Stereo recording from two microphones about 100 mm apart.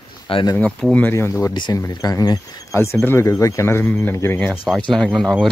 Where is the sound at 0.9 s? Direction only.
20° left (ahead or behind).